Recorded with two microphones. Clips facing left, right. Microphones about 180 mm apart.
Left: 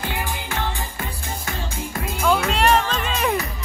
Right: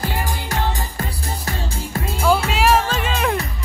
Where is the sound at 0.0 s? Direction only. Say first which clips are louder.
Right 3 dB; 40° right (ahead or behind).